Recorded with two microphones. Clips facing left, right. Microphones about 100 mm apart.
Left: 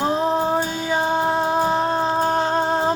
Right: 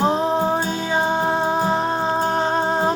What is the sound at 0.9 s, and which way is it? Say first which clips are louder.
Music: even; 20° right (ahead or behind).